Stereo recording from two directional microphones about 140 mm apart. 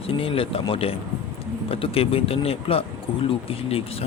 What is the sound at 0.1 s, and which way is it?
Speech, 40° left (ahead or behind).